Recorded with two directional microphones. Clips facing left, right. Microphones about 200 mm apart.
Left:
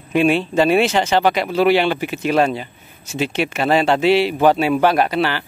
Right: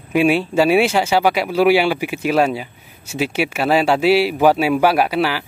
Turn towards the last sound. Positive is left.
turn(degrees=-5)  # may be behind; listen again after turning